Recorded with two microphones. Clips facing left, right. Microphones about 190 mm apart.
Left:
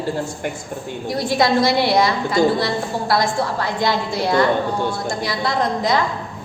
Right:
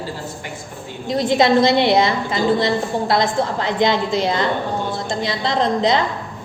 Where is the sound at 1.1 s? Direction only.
20° right (ahead or behind).